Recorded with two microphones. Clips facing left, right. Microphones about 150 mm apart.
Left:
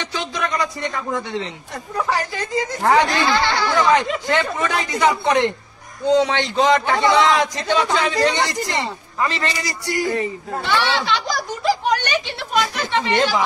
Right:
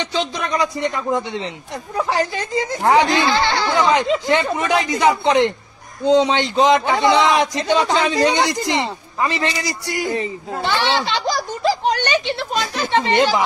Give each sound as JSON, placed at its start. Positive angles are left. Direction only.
{"t": 0.1, "sound": "a man's voice", "side_deg": -20}
{"t": 13.1, "sound": "a man's voice", "side_deg": -20}